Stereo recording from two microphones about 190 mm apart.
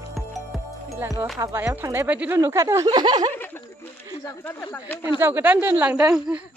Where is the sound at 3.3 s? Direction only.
10° left (ahead or behind).